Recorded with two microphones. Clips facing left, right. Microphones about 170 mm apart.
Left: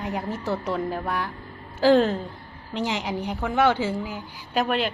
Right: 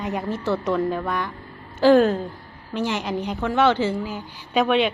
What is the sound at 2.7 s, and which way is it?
A woman's voice, 15° left (ahead or behind).